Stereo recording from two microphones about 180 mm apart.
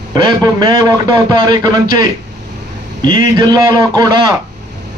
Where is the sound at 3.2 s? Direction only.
25° right (ahead or behind).